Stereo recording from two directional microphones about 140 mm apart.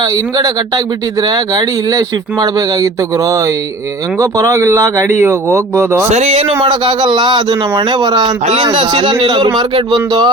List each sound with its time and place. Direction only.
0.0 s speech: 25° right (ahead or behind)
6.1 s a man's voice: 50° right (ahead or behind); by 10.2 s 30° right (ahead or behind)